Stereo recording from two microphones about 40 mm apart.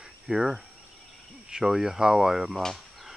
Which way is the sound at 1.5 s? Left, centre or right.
Centre.